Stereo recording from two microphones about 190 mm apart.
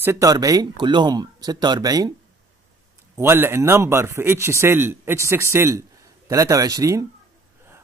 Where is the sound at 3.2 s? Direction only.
10° right (ahead or behind).